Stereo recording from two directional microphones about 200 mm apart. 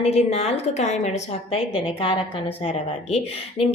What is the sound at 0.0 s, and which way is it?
A woman's voice, 30° left (ahead or behind).